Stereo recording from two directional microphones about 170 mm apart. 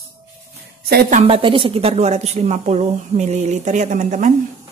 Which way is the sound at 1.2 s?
30° right (ahead or behind).